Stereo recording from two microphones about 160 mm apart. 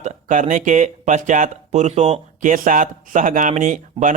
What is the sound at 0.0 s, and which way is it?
Speech, 50° right (ahead or behind).